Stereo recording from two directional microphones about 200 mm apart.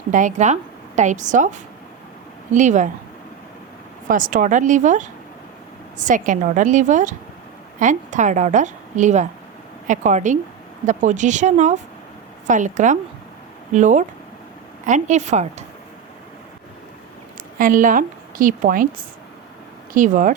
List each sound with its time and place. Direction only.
0.1 s a woman's voice: 40° right (ahead or behind)
4.1 s a woman's voice: 40° right (ahead or behind)
17.6 s a woman's voice: 40° right (ahead or behind)